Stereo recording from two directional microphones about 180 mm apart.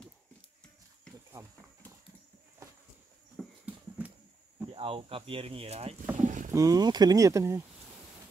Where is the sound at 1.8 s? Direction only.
10° left (ahead or behind).